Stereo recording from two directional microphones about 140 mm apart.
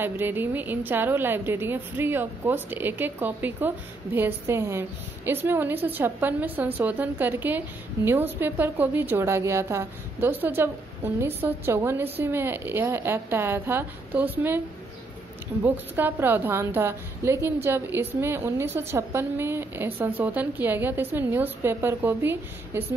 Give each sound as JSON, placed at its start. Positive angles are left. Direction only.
{"t": 0.0, "sound": "a woman's voice", "side_deg": -15}
{"t": 15.6, "sound": "a woman's voice", "side_deg": -15}